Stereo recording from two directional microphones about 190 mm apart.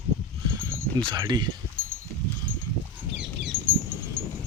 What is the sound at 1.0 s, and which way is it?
Speech, 25° right (ahead or behind).